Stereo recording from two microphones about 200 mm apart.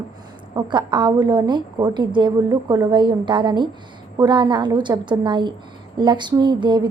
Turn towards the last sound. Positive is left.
turn(degrees=-20)  # may be behind; listen again after turning